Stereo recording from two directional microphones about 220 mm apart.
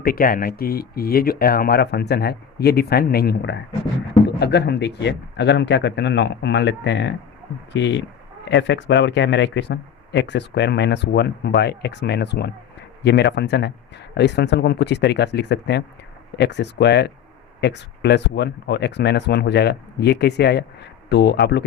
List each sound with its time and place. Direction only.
0.0 s speech: 40° left (ahead or behind)